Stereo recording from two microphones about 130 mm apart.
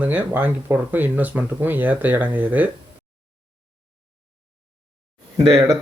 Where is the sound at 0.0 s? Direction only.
15° right (ahead or behind).